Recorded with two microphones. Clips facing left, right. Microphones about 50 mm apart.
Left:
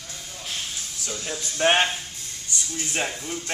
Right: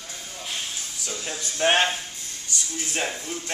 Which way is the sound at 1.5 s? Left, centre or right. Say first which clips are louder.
Left 1 dB; centre.